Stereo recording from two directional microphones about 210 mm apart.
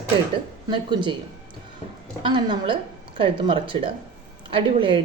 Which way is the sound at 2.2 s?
25° right (ahead or behind).